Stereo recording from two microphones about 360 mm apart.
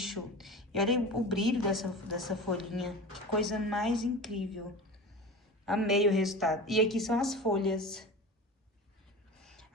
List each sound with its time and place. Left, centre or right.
0.0 s a woman's voice: centre
5.6 s a woman's voice: centre
9.4 s a sound: centre